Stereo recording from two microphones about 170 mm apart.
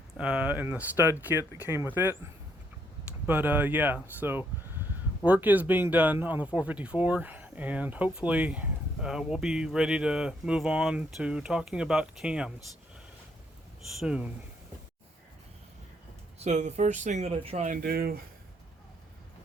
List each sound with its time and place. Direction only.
0.2 s speech: 5° right (ahead or behind)
3.2 s speech: 10° right (ahead or behind)
14.0 s speech: 5° right (ahead or behind)
16.4 s speech: 45° right (ahead or behind)
17.7 s speech: 60° right (ahead or behind)